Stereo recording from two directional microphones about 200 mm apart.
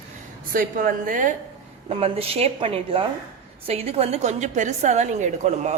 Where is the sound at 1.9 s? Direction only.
30° right (ahead or behind).